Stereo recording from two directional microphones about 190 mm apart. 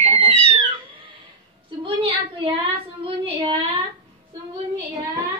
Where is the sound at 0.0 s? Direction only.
30° right (ahead or behind).